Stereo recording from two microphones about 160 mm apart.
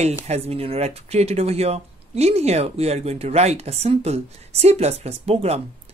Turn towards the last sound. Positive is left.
turn(degrees=-40)  # may be behind; listen again after turning